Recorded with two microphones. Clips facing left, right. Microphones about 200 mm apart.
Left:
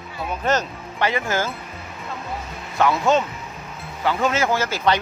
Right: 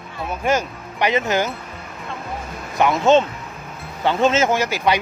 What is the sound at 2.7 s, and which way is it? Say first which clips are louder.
Speech: right 4 dB; 20° right (ahead or behind).